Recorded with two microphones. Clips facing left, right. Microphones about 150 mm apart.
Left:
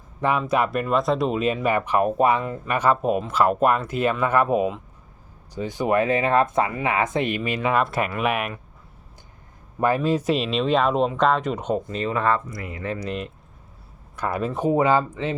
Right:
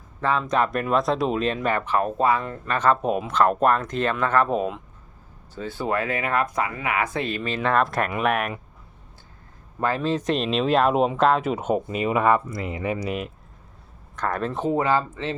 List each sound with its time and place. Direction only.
0.2 s speech: 15° left (ahead or behind)
9.8 s speech: 15° left (ahead or behind); by 12.4 s 15° right (ahead or behind)
12.5 s speech: 25° right (ahead or behind); by 13.3 s 5° right (ahead or behind)
14.2 s speech: 10° left (ahead or behind)